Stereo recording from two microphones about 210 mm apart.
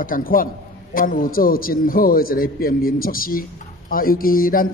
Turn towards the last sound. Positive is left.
turn(degrees=40)  # may be behind; listen again after turning